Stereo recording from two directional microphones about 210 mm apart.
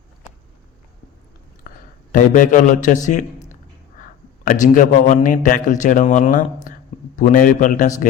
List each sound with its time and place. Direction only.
2.1 s a man's voice: 40° left (ahead or behind)
4.0 s a man's voice: 40° left (ahead or behind)